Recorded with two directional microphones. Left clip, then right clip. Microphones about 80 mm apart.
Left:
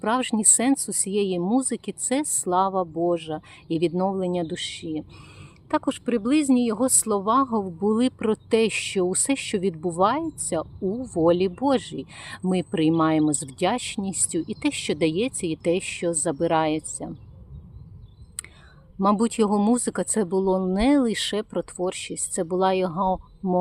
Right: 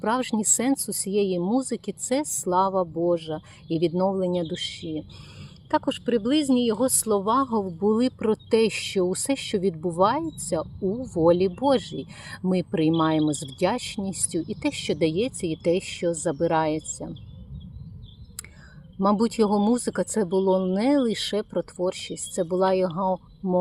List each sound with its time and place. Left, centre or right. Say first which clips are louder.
0.0 s speech: left 2 dB; left
18.9 s speech: left 1 dB; left